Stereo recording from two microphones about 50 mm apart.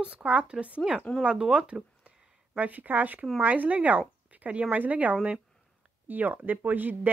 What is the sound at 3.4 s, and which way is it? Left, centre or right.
Speech, right.